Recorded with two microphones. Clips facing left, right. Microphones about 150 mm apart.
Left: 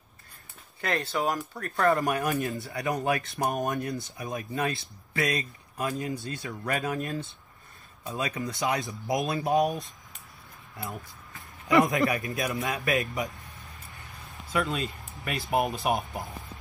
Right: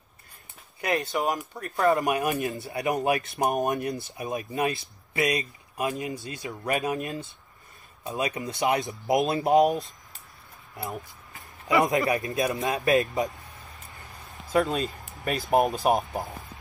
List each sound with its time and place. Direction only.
0.7 s speech: 15° right (ahead or behind)
1.0 s speech: centre (ahead or behind)
1.5 s speech: 20° right (ahead or behind)
10.8 s a sound: 25° right (ahead or behind)
12.1 s speech: 30° right (ahead or behind)
12.8 s speech: 40° right (ahead or behind)
14.5 s speech: 35° right (ahead or behind)